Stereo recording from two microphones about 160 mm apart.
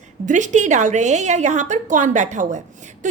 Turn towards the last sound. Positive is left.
turn(degrees=-50)  # may be behind; listen again after turning